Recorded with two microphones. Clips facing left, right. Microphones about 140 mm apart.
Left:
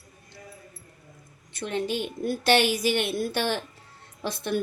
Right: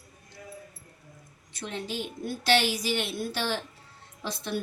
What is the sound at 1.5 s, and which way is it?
A woman's voice, 60° left (ahead or behind).